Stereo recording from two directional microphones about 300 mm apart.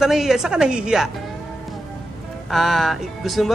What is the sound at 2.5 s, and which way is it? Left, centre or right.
A woman's voice, centre.